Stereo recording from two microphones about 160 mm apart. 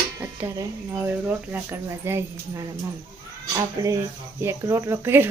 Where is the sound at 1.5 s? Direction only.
15° right (ahead or behind).